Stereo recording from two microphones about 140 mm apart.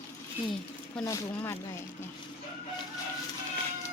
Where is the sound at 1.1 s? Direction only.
20° left (ahead or behind).